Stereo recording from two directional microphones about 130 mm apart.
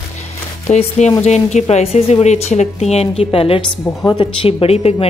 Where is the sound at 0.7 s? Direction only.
55° left (ahead or behind).